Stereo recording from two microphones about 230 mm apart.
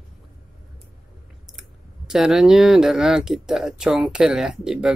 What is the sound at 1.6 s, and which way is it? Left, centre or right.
Speech, centre.